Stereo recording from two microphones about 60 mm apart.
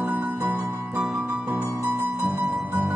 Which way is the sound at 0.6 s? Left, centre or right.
Right.